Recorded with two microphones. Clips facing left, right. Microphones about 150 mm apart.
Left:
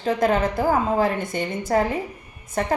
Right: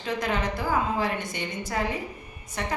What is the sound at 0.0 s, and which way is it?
A woman's voice, 50° left (ahead or behind).